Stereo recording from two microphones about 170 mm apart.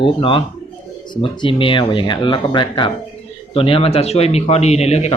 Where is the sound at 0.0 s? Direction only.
30° left (ahead or behind).